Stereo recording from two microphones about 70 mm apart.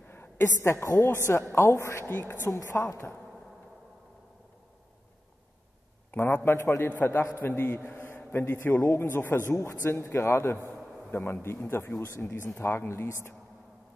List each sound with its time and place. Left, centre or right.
0.1 s a woman's voice: left
6.1 s a woman's voice: left
10.7 s a sound: centre
11.1 s a man's voice: left